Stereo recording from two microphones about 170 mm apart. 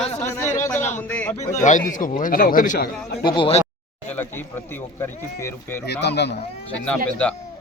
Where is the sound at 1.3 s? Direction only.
45° left (ahead or behind).